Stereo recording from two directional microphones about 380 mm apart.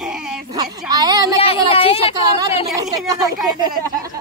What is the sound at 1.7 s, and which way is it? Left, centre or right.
Speech, centre.